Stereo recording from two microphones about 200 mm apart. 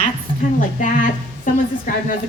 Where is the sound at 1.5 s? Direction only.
40° left (ahead or behind).